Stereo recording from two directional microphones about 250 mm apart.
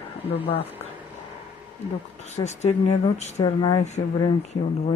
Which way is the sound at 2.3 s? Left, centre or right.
Left.